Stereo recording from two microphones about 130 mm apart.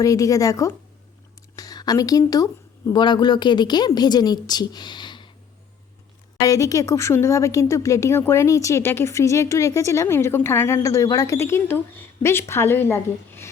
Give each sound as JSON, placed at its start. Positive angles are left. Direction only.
{"t": 0.0, "sound": "a woman's voice", "side_deg": 25}
{"t": 6.4, "sound": "a woman's voice", "side_deg": 25}